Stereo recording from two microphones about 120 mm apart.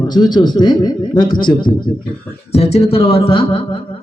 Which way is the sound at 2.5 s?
60° left (ahead or behind).